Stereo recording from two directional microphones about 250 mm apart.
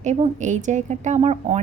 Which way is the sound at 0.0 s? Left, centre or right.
Right.